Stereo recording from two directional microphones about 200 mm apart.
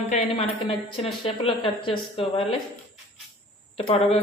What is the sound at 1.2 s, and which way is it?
Speech, 25° left (ahead or behind).